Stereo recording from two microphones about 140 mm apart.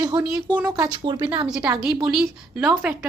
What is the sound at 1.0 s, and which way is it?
Speech, 35° right (ahead or behind).